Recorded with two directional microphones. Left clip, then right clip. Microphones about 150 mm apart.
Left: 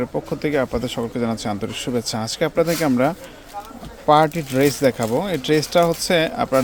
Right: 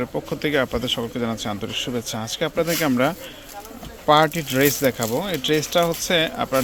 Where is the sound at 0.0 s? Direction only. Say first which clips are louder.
Left 2 dB; 5° left (ahead or behind); by 2.6 s 30° left (ahead or behind).